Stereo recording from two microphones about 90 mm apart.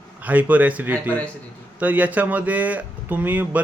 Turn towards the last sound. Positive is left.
turn(degrees=-20)  # may be behind; listen again after turning